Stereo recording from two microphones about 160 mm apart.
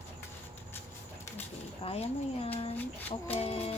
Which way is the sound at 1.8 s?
40° left (ahead or behind).